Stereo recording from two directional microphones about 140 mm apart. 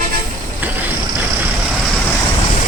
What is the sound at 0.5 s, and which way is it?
Vehicle, 10° right (ahead or behind).